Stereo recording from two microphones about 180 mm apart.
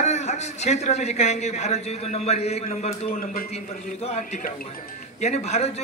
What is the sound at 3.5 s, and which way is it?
A man's voice, 35° left (ahead or behind).